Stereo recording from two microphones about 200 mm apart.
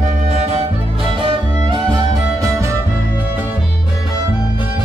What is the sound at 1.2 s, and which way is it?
Music, 25° right (ahead or behind).